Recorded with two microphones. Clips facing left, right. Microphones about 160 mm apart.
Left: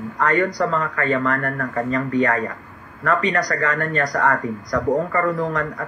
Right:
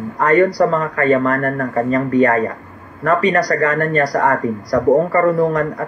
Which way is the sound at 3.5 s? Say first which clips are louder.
Right 6 dB; 45° right (ahead or behind).